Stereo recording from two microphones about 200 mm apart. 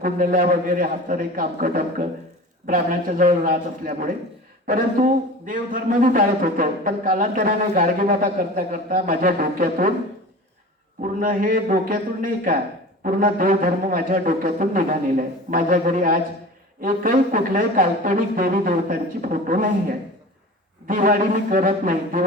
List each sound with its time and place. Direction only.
0.0 s a man's voice: 45° right (ahead or behind)
11.0 s a man's voice: 45° right (ahead or behind)